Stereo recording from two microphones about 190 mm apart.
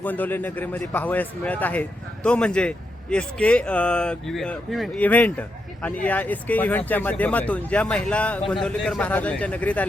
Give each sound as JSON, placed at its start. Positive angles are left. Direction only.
{"t": 0.0, "sound": "a man's voice", "side_deg": 10}